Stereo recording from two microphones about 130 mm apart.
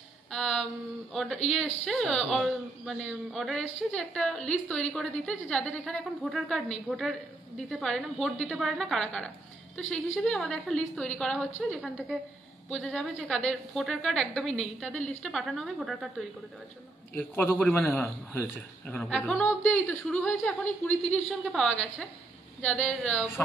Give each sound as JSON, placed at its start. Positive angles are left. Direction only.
{"t": 0.3, "sound": "a sound", "side_deg": 0}
{"t": 1.1, "sound": "a man's voice", "side_deg": 0}
{"t": 17.1, "sound": "a man's voice", "side_deg": 10}
{"t": 18.9, "sound": "a man's voice", "side_deg": 5}